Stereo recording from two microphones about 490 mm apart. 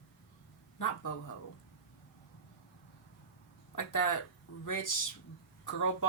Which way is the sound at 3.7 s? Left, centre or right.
Left.